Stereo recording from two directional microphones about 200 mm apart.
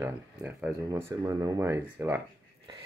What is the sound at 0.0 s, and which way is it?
Speech, 5° right (ahead or behind).